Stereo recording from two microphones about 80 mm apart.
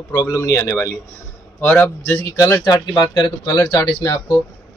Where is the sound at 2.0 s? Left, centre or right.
Left.